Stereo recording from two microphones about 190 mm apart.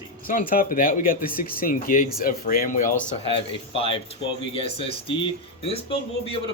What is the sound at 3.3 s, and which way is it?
Speech, 30° left (ahead or behind).